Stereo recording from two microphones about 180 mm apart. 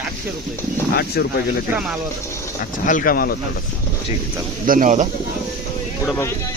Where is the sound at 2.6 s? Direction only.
50° left (ahead or behind).